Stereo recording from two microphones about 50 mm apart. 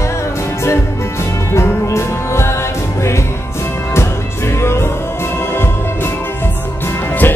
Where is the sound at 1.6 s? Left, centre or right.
Left.